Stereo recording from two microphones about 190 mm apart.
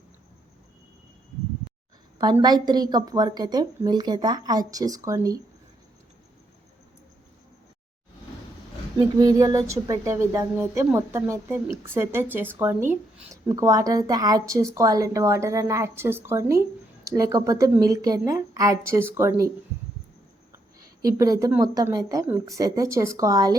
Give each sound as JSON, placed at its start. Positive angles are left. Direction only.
{"t": 2.1, "sound": "a woman's voice", "side_deg": -20}
{"t": 9.0, "sound": "speech", "side_deg": -20}
{"t": 21.2, "sound": "speech", "side_deg": -15}